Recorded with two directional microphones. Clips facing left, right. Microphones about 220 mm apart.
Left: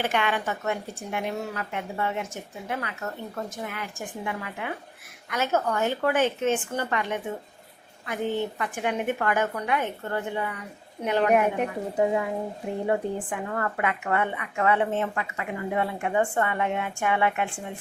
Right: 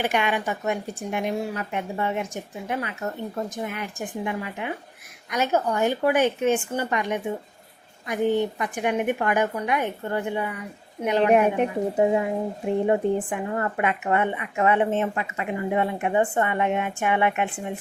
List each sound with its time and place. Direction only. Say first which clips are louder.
0.0 s a woman's voice: right 2 dB; 15° right (ahead or behind)